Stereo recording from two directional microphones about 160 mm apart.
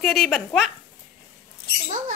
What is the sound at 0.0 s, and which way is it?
Speech, centre (ahead or behind).